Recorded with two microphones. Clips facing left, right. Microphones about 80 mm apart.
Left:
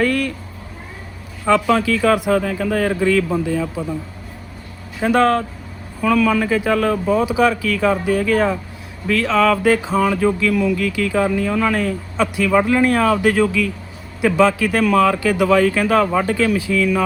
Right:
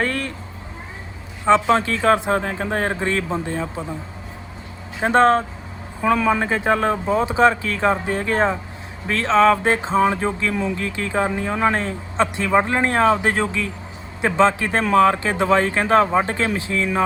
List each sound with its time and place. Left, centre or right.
0.0 s speech: right
1.5 s speech: right
4.9 s speech: right